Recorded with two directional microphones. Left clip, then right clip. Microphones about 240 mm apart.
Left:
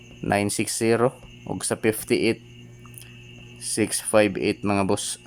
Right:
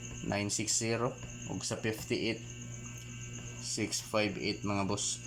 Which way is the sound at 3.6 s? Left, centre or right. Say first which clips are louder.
Left 11 dB; left.